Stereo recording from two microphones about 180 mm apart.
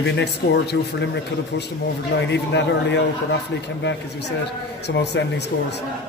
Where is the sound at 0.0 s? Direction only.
65° left (ahead or behind).